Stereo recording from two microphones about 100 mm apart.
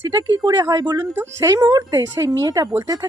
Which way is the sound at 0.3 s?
40° right (ahead or behind).